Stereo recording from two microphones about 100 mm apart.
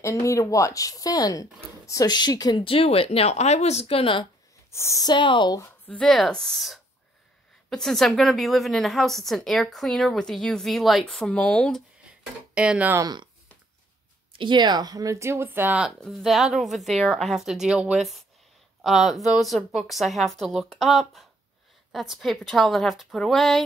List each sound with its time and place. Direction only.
0.0 s speech: 30° left (ahead or behind)
2.6 s speech: 75° left (ahead or behind)
4.6 s speech: 30° left (ahead or behind)
5.0 s speech: 55° left (ahead or behind)
5.9 s a woman's voice: 5° left (ahead or behind)
12.5 s speech: 10° right (ahead or behind)
13.0 s speech: 45° right (ahead or behind)
14.4 s a woman's voice: 50° right (ahead or behind); by 15.9 s 15° right (ahead or behind)
16.0 s a woman's voice: centre (ahead or behind)